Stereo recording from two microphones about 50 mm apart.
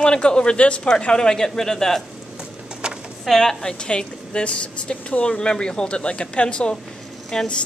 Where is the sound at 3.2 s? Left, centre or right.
Centre.